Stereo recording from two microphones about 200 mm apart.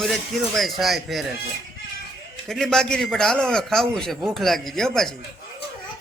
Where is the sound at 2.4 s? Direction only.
Centre (ahead or behind).